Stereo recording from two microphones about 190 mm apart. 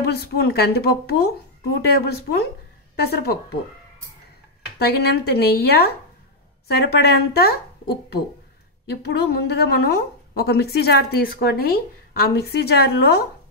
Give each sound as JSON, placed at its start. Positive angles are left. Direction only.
{"t": 0.0, "sound": "speech", "side_deg": 55}
{"t": 4.7, "sound": "speech", "side_deg": 55}